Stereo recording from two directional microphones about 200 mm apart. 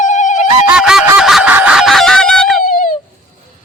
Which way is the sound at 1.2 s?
Centre (ahead or behind).